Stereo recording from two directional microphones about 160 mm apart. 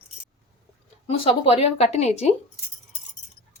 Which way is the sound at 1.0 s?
35° left (ahead or behind).